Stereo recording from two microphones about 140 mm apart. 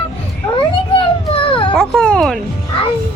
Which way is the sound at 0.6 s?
35° left (ahead or behind).